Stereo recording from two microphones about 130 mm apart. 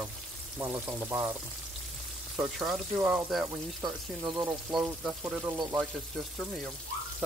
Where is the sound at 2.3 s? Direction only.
5° right (ahead or behind).